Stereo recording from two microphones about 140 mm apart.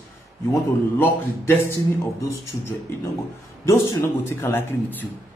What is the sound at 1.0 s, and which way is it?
Speech, 15° left (ahead or behind).